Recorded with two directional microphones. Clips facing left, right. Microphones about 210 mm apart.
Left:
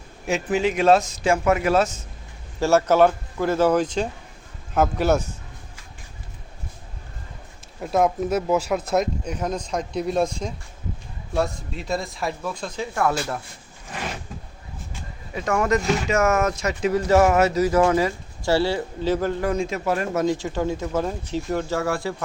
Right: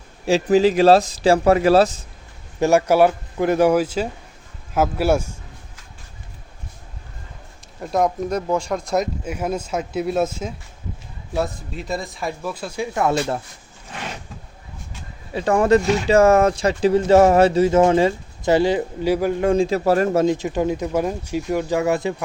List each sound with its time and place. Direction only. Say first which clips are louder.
0.3 s speech: right 7 dB; 35° right (ahead or behind)
2.6 s speech: right 2 dB; 15° right (ahead or behind)
7.8 s speech: even; 5° left (ahead or behind); by 13.1 s 20° right (ahead or behind)
15.3 s speech: right 6 dB; 30° right (ahead or behind); by 19.4 s 10° right (ahead or behind)
19.4 s speech: right 6 dB; 30° right (ahead or behind)
20.2 s speech: right 3 dB; 20° right (ahead or behind)